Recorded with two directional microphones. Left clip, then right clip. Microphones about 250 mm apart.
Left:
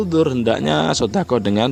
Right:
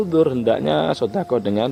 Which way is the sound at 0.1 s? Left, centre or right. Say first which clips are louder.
Even; left.